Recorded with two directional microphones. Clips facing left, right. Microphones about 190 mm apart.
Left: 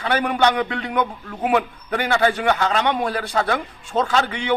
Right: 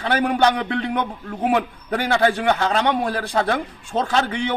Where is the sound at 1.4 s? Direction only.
30° right (ahead or behind).